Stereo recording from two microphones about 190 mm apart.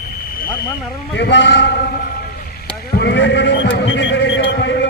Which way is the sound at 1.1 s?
70° left (ahead or behind).